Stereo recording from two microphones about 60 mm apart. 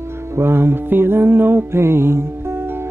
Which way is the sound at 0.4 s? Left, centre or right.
Right.